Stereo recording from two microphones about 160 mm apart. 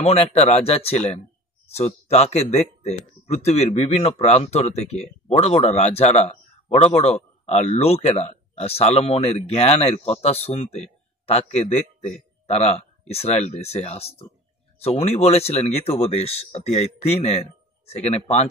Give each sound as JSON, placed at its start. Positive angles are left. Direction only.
{"t": 0.0, "sound": "speech", "side_deg": 40}